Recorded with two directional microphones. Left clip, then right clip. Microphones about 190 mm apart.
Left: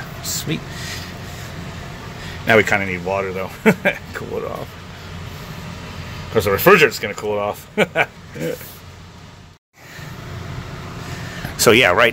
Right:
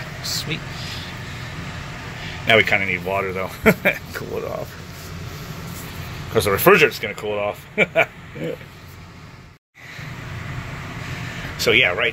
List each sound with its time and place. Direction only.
0.5 s speech: 35° left (ahead or behind)
2.4 s speech: 15° left (ahead or behind)
6.3 s speech: centre (ahead or behind)
11.5 s speech: 35° left (ahead or behind)